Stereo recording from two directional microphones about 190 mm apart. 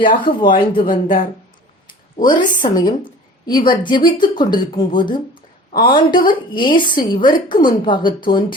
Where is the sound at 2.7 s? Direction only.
20° left (ahead or behind).